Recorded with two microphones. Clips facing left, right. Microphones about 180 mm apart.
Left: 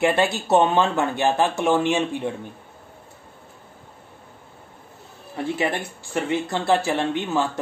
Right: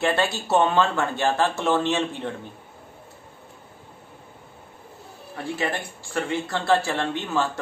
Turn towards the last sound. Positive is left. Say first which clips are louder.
# left 2 dB
turn(degrees=15)  # may be behind; listen again after turning